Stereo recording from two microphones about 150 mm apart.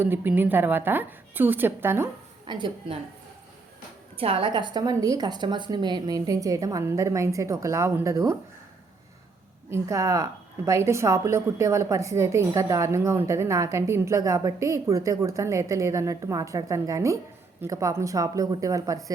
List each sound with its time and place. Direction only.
0.0 s a woman's voice: 15° right (ahead or behind)
2.5 s a woman's voice: 30° right (ahead or behind)
4.2 s a woman's voice: 40° right (ahead or behind); by 8.4 s 20° right (ahead or behind)
9.6 s a woman's voice: 20° right (ahead or behind)